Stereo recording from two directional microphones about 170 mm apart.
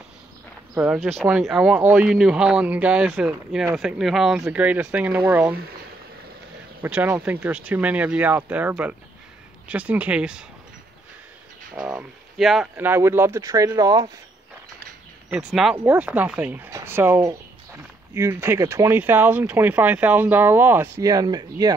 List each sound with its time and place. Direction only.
0.7 s speech: 15° right (ahead or behind)
6.8 s speech: 10° right (ahead or behind)
11.7 s speech: 5° right (ahead or behind)
12.7 s speech: 15° right (ahead or behind)
15.2 s speech: 5° right (ahead or behind); by 21.7 s 25° right (ahead or behind)